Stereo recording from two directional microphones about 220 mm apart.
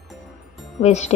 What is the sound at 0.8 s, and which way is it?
Speech, 30° left (ahead or behind).